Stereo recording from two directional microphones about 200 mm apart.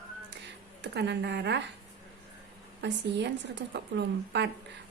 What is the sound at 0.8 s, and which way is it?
Speech, 55° right (ahead or behind).